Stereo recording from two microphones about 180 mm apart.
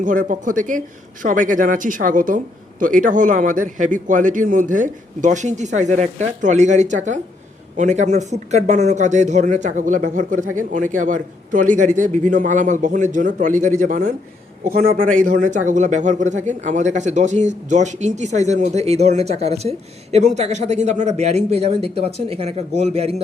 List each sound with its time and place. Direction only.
0.0 s a man's voice: 45° right (ahead or behind)